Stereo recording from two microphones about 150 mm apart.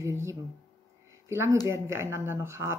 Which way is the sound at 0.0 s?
20° right (ahead or behind).